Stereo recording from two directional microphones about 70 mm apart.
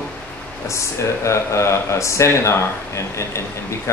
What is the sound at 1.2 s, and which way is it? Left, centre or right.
Speech, left.